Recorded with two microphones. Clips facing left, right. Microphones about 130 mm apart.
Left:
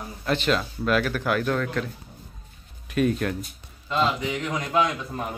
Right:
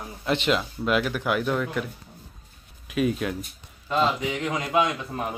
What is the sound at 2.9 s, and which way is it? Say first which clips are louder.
Speech: left 1 dB; centre (ahead or behind).